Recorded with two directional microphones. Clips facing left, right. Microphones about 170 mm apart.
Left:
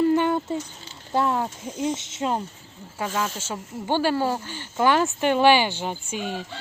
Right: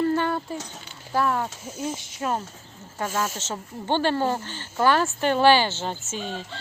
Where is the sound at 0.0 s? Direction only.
15° left (ahead or behind).